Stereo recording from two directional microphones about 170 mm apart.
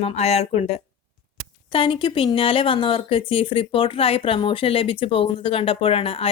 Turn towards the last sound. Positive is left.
turn(degrees=35)  # may be behind; listen again after turning